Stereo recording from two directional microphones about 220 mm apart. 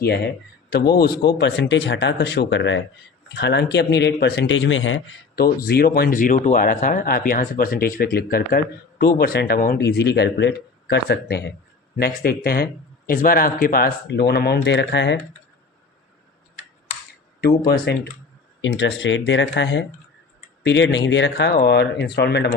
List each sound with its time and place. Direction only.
0.7 s speech: 50° left (ahead or behind)
5.4 s speech: 45° left (ahead or behind)
17.4 s speech: 45° left (ahead or behind)